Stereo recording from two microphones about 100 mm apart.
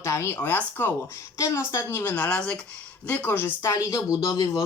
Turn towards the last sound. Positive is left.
turn(degrees=35)  # may be behind; listen again after turning